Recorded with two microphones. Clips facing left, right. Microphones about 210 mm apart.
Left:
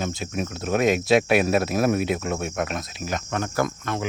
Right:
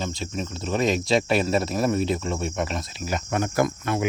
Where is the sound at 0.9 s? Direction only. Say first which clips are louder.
Left 4 dB; 5° left (ahead or behind).